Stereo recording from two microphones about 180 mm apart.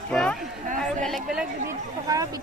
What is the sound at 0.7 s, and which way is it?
Chatter, 5° left (ahead or behind).